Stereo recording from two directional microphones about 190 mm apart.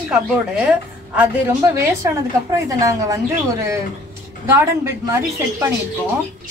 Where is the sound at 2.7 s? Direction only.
15° right (ahead or behind).